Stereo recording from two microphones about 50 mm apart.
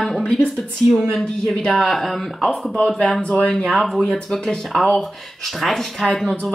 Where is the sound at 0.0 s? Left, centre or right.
Centre.